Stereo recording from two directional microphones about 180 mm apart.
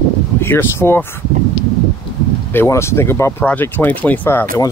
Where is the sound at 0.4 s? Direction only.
10° left (ahead or behind).